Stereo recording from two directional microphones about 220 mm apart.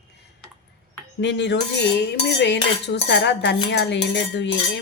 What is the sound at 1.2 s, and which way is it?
Cutlery, 55° left (ahead or behind).